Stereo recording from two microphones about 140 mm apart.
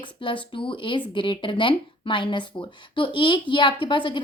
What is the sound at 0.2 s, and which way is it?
Speech, 35° left (ahead or behind).